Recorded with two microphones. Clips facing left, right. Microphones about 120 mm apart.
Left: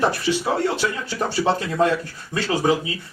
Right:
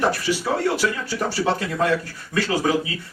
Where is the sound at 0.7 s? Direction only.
25° left (ahead or behind).